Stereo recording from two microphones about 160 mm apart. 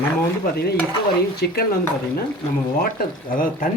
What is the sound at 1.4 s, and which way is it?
Speech, 80° left.